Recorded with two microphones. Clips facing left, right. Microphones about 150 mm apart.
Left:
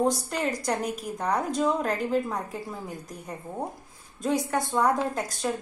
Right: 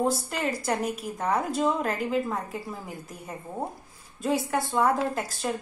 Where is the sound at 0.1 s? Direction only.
5° right (ahead or behind).